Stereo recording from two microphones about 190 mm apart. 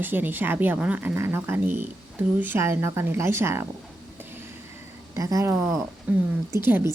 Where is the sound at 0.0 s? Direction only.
10° right (ahead or behind).